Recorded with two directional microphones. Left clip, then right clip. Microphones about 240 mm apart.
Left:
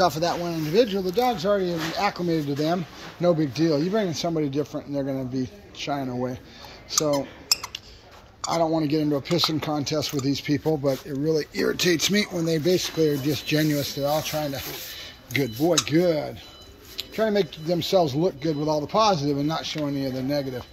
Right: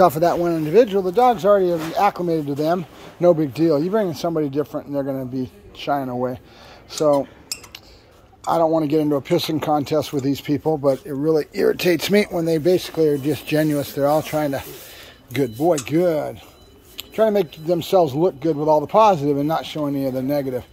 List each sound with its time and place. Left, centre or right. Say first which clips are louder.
0.0 s speech: right 7 dB; right
0.7 s speech: right 6 dB; centre
4.7 s speech: right 4 dB; right
5.1 s speech: right 3 dB; centre
7.5 s a sound: left 8 dB; centre
8.5 s speech: right 6 dB; centre
14.0 s speech: right 7 dB; right
15.3 s speech: right 3 dB; centre
19.0 s speech: right 6 dB; right
19.6 s speech: right 4 dB; centre